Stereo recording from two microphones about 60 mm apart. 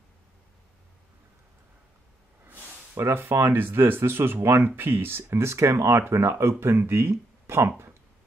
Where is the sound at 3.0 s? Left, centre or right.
Right.